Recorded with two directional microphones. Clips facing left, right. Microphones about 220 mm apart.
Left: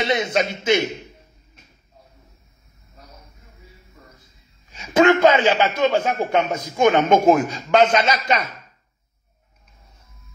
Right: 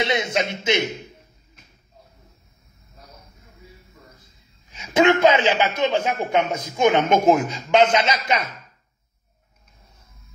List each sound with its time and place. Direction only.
0.3 s speech: 20° right (ahead or behind)
4.6 s speech: 20° right (ahead or behind)